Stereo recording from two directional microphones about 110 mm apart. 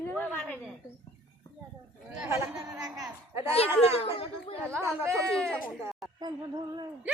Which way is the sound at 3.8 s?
65° left (ahead or behind).